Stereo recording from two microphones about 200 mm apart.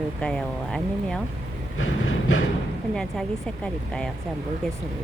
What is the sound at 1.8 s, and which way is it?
Train, 90° left.